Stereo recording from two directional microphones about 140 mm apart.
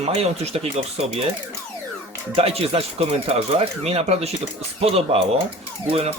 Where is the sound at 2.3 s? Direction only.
45° right (ahead or behind).